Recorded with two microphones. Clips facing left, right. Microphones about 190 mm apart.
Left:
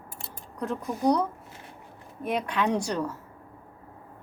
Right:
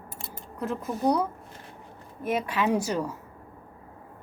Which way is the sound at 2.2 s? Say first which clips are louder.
Right 1 dB; centre (ahead or behind).